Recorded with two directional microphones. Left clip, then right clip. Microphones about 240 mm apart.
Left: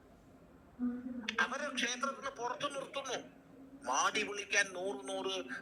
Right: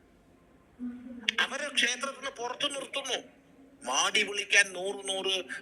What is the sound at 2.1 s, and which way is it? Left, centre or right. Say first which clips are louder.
A man's voice: right 4 dB; right.